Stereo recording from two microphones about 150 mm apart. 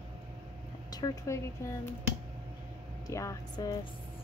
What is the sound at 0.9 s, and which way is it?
Speech, 20° left (ahead or behind).